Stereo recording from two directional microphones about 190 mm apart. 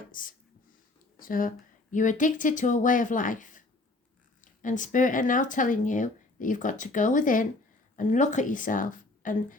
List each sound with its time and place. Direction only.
0.1 s speech: 45° left (ahead or behind)